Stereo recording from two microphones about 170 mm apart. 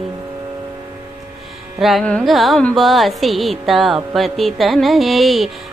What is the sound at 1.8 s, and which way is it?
Carnatic music, centre (ahead or behind).